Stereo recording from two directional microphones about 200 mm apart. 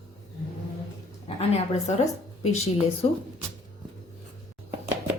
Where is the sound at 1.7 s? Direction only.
30° left (ahead or behind).